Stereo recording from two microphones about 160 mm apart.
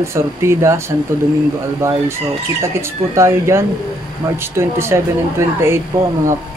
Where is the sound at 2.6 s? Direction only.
20° right (ahead or behind).